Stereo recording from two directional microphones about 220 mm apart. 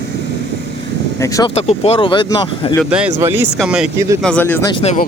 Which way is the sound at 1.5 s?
30° left (ahead or behind).